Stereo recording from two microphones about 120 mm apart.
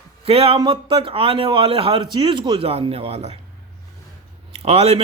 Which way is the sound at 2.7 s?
55° right (ahead or behind).